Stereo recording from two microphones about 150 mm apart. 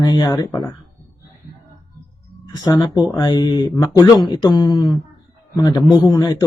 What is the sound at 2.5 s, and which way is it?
Speech, 25° left (ahead or behind).